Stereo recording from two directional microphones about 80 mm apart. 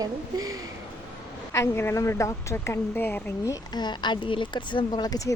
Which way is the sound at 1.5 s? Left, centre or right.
Left.